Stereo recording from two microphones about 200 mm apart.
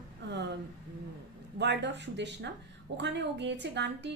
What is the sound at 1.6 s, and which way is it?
A woman's voice, 60° right (ahead or behind).